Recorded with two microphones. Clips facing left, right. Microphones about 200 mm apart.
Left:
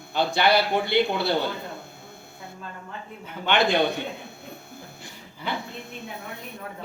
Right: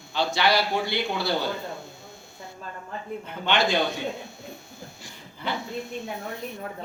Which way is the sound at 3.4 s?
60° left (ahead or behind).